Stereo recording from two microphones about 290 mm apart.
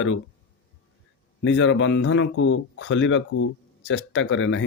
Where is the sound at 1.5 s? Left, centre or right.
Left.